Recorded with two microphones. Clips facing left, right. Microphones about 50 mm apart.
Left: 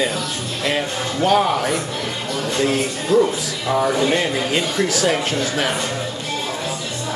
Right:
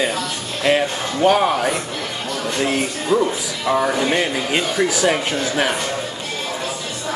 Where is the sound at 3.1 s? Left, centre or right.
Right.